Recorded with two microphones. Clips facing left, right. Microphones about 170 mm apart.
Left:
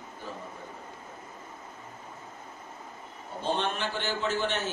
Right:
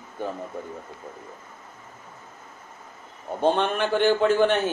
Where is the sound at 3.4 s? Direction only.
55° right (ahead or behind).